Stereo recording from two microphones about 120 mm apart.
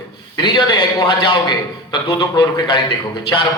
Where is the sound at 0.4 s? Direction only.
40° left (ahead or behind).